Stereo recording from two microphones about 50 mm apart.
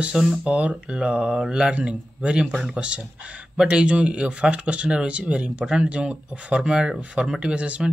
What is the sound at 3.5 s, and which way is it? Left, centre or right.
Speech, centre.